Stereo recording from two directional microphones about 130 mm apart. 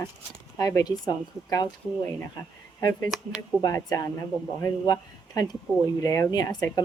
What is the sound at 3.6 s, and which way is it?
Speech, 30° left (ahead or behind).